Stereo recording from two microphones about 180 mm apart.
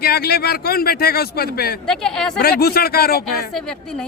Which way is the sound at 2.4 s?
60° left (ahead or behind).